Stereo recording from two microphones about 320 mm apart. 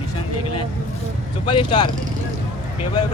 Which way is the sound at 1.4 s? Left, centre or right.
Centre.